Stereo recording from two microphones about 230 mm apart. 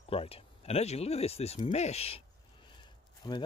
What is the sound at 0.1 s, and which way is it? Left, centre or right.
Speech, left.